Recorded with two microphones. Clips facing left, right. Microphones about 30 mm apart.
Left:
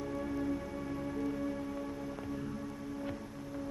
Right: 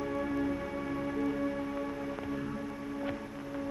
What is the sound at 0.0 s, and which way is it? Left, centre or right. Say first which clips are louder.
Music: right 4 dB; right.